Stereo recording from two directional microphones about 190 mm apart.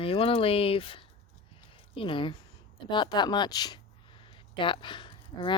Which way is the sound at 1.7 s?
25° left (ahead or behind).